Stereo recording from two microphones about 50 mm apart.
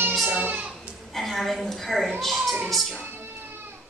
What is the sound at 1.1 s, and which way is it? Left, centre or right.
A woman's voice, centre.